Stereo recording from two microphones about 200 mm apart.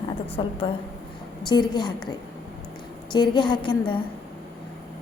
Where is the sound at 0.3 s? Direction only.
25° left (ahead or behind).